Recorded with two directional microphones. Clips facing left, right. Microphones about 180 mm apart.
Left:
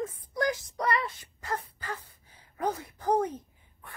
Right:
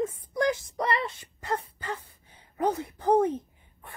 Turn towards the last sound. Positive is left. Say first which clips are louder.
# right 2 dB
turn(degrees=-25)  # may be behind; listen again after turning